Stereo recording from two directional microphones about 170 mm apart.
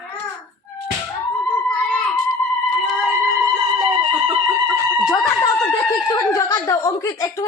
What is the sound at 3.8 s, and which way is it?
Music, 30° right (ahead or behind).